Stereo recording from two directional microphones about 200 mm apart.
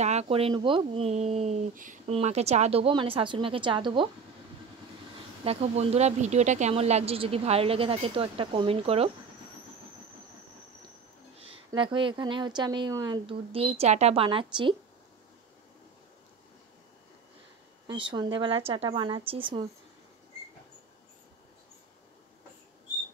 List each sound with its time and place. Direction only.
0.0 s speech: 35° right (ahead or behind)
5.4 s speech: 30° right (ahead or behind)
11.4 s speech: 25° right (ahead or behind)
17.8 s speech: 25° right (ahead or behind)